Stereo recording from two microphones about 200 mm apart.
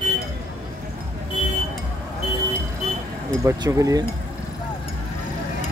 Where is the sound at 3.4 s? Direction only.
15° right (ahead or behind).